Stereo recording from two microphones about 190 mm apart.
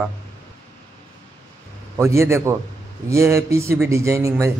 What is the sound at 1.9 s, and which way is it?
Speech, 15° right (ahead or behind).